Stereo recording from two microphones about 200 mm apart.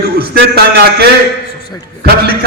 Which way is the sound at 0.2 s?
50° right (ahead or behind).